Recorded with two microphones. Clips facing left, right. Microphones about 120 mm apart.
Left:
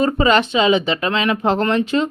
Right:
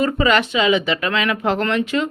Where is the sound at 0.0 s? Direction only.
30° left (ahead or behind).